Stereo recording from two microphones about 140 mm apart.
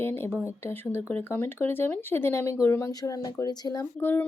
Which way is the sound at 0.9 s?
15° left (ahead or behind).